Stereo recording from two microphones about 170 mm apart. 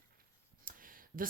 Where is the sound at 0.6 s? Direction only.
55° right (ahead or behind).